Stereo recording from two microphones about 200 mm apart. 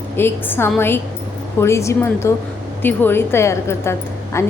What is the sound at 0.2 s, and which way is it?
A woman's voice, 10° left (ahead or behind).